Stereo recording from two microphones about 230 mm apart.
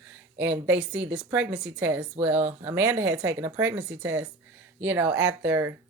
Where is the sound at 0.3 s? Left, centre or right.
Centre.